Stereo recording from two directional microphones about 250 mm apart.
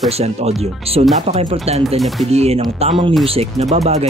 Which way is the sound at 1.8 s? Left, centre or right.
Centre.